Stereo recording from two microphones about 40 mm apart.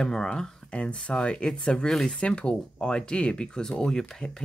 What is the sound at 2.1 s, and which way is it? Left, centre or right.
Speech, left.